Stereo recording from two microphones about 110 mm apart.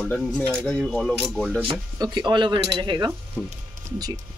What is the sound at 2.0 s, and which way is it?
Speech, 40° right (ahead or behind).